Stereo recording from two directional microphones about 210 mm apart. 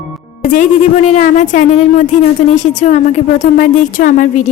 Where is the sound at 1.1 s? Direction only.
35° left (ahead or behind).